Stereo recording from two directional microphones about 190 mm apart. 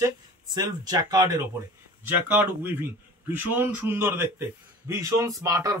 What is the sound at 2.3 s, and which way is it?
Speech, 10° right (ahead or behind).